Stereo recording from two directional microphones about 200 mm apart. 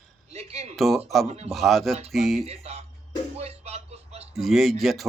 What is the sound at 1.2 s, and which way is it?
Speech, 30° right (ahead or behind).